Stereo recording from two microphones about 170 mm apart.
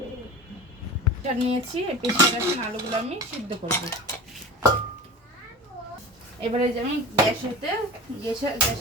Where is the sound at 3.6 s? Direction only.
40° right (ahead or behind).